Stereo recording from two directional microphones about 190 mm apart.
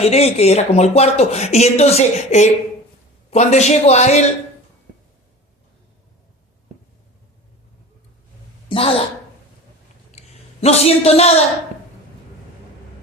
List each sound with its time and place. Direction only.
0.0 s speech: 35° left (ahead or behind)
8.7 s a woman's voice: 30° left (ahead or behind)
10.1 s a sound: 35° left (ahead or behind)